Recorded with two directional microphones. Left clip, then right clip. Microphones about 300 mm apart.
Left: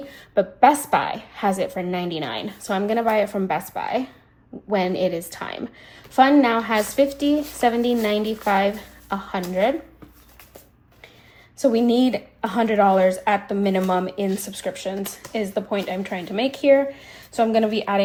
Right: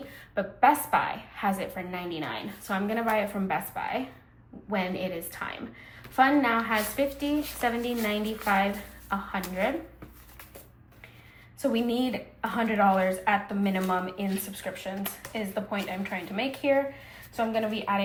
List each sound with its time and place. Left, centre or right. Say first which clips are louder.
0.3 s a woman's voice: left 7 dB; left
11.5 s a woman's voice: left 9 dB; centre